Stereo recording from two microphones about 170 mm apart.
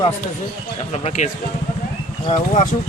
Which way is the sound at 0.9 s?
40° left (ahead or behind).